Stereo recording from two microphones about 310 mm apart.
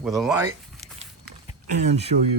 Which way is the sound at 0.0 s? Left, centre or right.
Centre.